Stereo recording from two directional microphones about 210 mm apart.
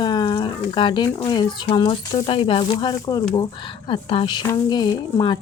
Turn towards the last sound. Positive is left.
turn(degrees=20)  # may be behind; listen again after turning